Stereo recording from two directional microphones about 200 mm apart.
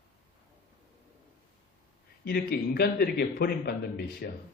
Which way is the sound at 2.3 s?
50° left (ahead or behind).